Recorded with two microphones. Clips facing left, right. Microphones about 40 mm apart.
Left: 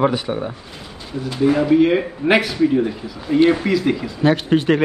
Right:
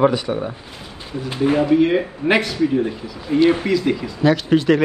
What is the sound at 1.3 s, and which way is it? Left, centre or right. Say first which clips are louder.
Speech: left 1 dB; right.